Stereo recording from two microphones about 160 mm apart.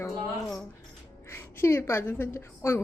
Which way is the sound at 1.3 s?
15° left (ahead or behind).